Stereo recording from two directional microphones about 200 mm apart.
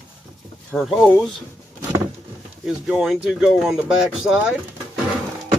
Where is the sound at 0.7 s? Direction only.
Centre (ahead or behind).